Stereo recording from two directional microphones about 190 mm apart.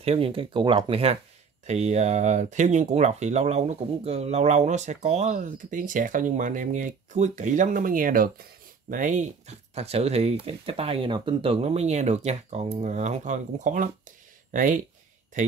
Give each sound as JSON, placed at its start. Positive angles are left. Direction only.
{"t": 0.0, "sound": "speech", "side_deg": -30}